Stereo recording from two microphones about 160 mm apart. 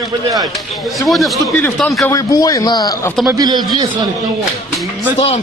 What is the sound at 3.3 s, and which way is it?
Speech, 25° right (ahead or behind).